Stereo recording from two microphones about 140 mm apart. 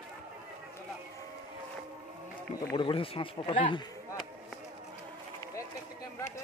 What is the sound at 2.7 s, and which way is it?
Speech, 40° left (ahead or behind).